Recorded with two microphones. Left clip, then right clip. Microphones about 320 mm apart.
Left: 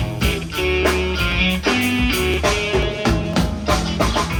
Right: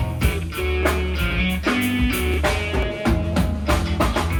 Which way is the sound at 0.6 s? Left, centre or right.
Centre.